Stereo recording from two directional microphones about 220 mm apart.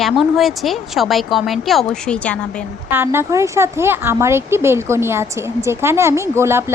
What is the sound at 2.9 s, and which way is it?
Speech, 10° right (ahead or behind).